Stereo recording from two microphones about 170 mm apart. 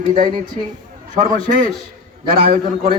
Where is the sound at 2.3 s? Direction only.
60° right (ahead or behind).